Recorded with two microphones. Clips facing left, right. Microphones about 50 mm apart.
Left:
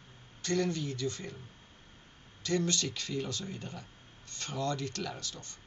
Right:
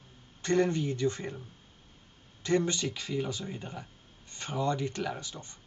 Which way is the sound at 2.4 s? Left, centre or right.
Right.